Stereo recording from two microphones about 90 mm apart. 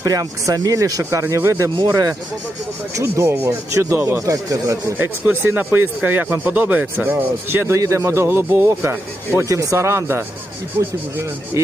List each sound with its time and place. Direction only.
0.0 s speech: 40° right (ahead or behind)
3.0 s speech: 30° right (ahead or behind)
4.9 s speech: 20° right (ahead or behind)